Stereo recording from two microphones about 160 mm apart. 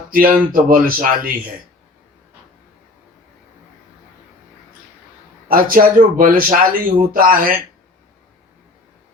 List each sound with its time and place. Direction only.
0.1 s a man's voice: 60° right (ahead or behind)
5.5 s a man's voice: 60° right (ahead or behind)